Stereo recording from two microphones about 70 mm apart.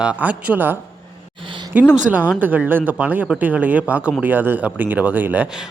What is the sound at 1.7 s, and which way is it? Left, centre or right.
Speech, right.